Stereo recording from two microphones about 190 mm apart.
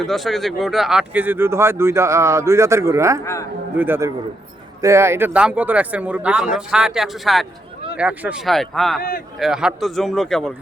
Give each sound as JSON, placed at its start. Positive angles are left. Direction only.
{"t": 0.0, "sound": "speech", "side_deg": 0}
{"t": 9.0, "sound": "speech", "side_deg": 50}
{"t": 9.4, "sound": "speech", "side_deg": -5}